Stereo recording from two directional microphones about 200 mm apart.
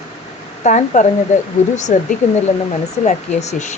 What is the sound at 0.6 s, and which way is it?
Speech, 35° left (ahead or behind).